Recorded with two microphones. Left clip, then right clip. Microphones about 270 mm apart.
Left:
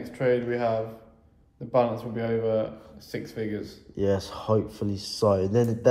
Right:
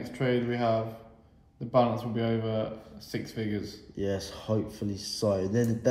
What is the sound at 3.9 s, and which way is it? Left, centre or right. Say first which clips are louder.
A man's voice: left 7 dB; centre.